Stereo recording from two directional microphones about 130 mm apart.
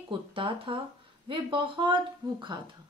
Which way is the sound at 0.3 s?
40° right (ahead or behind).